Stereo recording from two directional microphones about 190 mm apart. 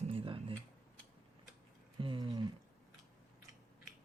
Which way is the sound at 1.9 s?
25° right (ahead or behind).